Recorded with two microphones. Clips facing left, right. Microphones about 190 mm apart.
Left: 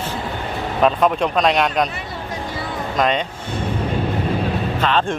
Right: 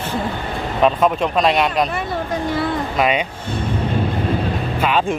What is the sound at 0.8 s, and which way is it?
Speech, centre (ahead or behind).